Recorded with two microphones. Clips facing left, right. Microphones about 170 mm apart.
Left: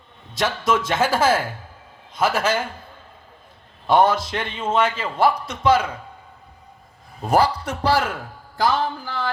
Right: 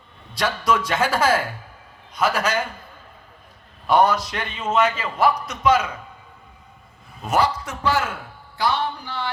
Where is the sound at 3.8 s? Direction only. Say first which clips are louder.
Left 1 dB; 25° left (ahead or behind).